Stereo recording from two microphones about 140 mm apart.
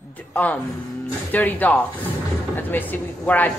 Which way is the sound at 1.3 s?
10° left (ahead or behind).